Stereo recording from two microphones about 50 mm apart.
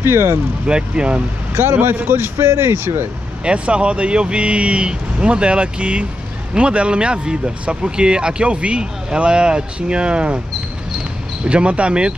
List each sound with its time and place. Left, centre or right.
0.0 s speech: right
0.7 s speech: centre
1.6 s speech: right
3.4 s speech: right
11.4 s speech: right